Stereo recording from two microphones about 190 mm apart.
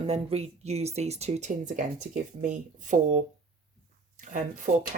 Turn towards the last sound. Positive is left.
turn(degrees=-40)  # may be behind; listen again after turning